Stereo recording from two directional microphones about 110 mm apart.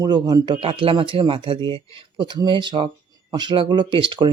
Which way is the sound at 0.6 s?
55° right (ahead or behind).